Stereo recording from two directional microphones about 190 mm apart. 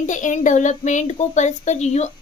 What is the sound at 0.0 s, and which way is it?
A child's voice, 40° left (ahead or behind).